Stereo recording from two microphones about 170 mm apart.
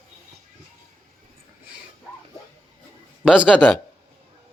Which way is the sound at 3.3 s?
5° right (ahead or behind).